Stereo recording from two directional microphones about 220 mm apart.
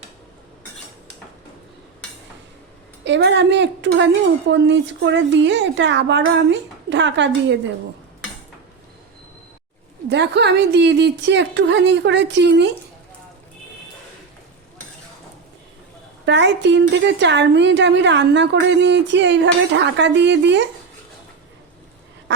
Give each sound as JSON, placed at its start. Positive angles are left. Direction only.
{"t": 3.0, "sound": "a woman's voice", "side_deg": -55}
{"t": 10.1, "sound": "a woman's voice", "side_deg": -50}
{"t": 16.2, "sound": "a woman's voice", "side_deg": -55}